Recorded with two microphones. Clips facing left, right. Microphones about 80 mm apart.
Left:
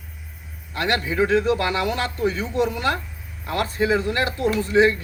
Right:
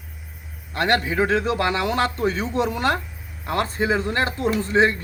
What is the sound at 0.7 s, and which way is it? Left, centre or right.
Speech, right.